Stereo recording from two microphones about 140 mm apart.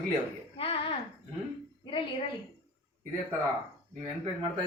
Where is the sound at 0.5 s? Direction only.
45° left (ahead or behind).